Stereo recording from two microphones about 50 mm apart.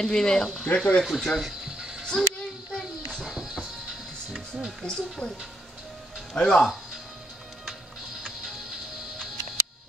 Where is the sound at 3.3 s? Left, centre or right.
Centre.